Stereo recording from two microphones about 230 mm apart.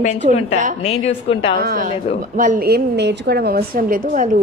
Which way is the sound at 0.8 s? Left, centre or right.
Left.